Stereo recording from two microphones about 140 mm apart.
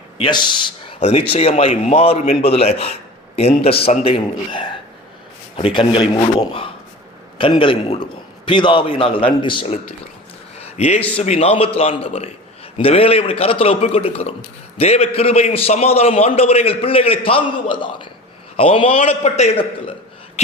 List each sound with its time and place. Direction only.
0.2 s a man's voice: 35° left (ahead or behind)
0.9 s a man's voice: 50° left (ahead or behind)
10.6 s a sound: 50° left (ahead or behind)
11.2 s a man's voice: 50° left (ahead or behind)
19.0 s a man's voice: 55° left (ahead or behind)